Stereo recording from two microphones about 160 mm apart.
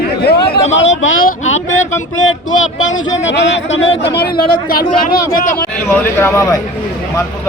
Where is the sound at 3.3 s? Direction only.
90° left.